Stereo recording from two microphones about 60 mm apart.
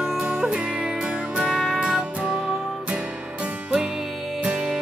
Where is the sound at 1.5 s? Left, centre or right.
Centre.